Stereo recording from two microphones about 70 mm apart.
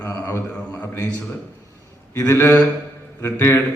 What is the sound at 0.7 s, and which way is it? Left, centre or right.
Speech, left.